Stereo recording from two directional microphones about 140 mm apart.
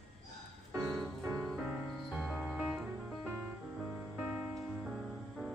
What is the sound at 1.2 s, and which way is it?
Music, 15° right (ahead or behind).